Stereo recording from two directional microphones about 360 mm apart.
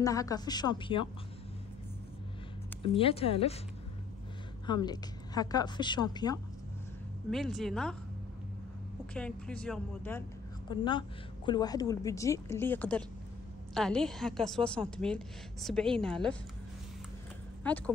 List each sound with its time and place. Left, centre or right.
0.0 s a woman's voice: centre
3.0 s a woman's voice: centre
4.6 s a woman's voice: centre
7.2 s a woman's voice: centre
9.1 s a woman's voice: centre
17.6 s a woman's voice: centre